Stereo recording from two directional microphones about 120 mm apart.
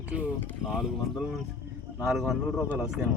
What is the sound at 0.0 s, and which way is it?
Speech, 10° right (ahead or behind).